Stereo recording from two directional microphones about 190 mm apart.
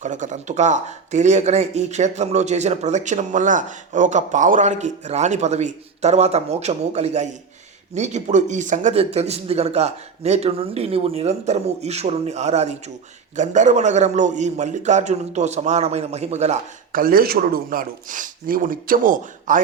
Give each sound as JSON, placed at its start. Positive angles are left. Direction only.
{"t": 0.0, "sound": "speech", "side_deg": -40}